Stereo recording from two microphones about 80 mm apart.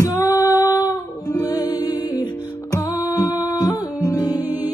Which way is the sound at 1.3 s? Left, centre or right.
Left.